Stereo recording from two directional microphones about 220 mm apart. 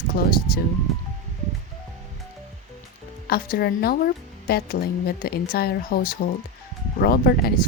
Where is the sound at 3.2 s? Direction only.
45° left (ahead or behind).